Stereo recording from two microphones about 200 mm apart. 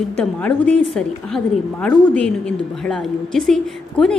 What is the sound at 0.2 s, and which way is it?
A woman's voice, 5° left (ahead or behind).